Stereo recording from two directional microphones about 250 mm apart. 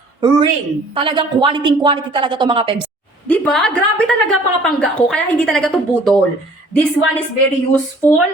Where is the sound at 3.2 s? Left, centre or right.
Centre.